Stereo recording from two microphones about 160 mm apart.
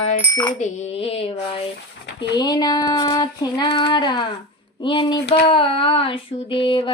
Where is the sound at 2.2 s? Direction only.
25° left (ahead or behind).